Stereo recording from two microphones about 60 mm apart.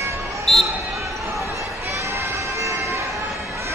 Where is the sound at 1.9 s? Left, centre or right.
Right.